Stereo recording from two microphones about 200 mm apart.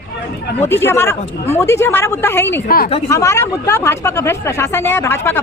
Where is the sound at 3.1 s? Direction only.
15° left (ahead or behind).